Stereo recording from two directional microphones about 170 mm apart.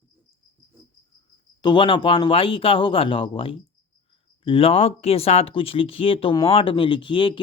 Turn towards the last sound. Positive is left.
turn(degrees=30)  # may be behind; listen again after turning